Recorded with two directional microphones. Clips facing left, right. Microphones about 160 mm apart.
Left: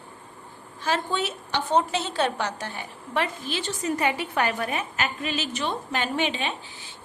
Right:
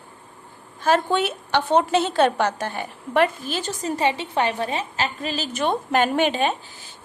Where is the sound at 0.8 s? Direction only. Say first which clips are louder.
Right 7 dB; 55° right (ahead or behind).